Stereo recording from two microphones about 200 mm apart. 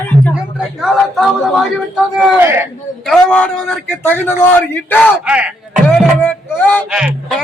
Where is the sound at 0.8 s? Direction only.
Centre (ahead or behind).